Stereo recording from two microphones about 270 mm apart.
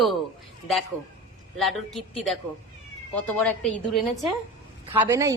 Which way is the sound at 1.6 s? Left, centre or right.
Centre.